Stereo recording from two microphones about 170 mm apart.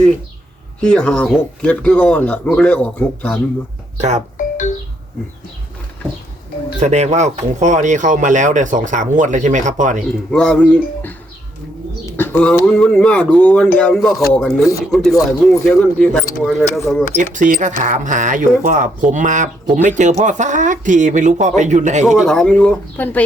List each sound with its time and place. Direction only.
0.8 s speech: 5° left (ahead or behind)
3.9 s speech: 45° right (ahead or behind)
4.4 s music: 50° left (ahead or behind)
6.7 s speech: 40° right (ahead or behind)
10.3 s speech: 5° left (ahead or behind)
17.3 s speech: 50° right (ahead or behind)
22.0 s speech: centre (ahead or behind)